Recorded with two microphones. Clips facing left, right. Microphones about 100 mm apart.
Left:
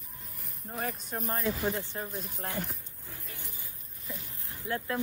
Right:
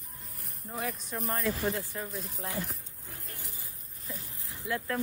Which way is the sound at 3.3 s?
30° left (ahead or behind).